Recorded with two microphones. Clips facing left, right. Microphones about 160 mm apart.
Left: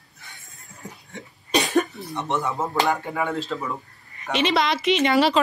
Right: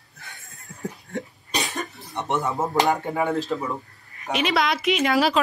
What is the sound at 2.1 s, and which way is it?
Speech, 20° right (ahead or behind).